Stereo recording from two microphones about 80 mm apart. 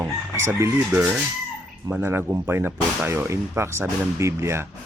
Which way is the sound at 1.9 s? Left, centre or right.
Right.